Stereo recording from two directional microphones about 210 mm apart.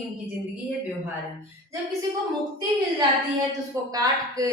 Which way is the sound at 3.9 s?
15° right (ahead or behind).